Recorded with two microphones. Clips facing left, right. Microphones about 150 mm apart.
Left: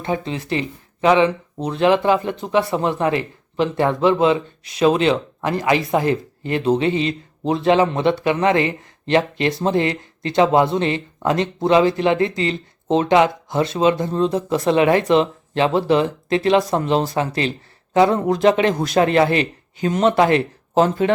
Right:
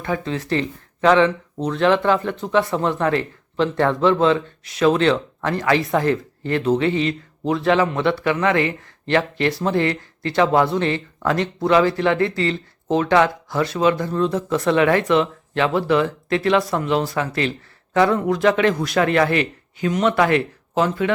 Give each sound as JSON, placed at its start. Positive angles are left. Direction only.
{"t": 0.0, "sound": "speech", "side_deg": 20}